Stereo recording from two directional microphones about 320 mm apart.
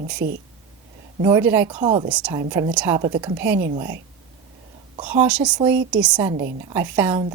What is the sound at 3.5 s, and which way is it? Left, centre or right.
Speech, right.